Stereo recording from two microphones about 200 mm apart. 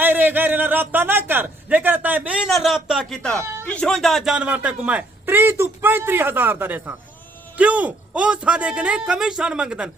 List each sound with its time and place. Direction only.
0.0 s a man's voice: 10° right (ahead or behind)
3.3 s speech: 15° right (ahead or behind)
3.7 s a man's voice: 5° left (ahead or behind)